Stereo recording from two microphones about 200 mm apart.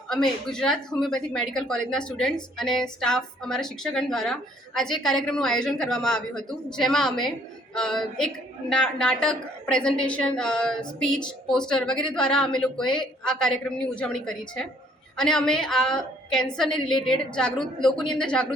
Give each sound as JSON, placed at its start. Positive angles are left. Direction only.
{"t": 0.1, "sound": "a woman's voice", "side_deg": 0}